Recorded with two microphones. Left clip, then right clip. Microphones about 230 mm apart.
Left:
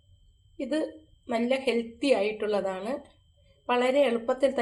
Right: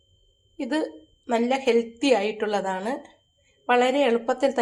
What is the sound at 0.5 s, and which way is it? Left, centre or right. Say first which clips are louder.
Speech: right 3 dB; right.